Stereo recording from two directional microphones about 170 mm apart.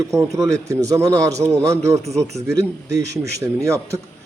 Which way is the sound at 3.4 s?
15° right (ahead or behind).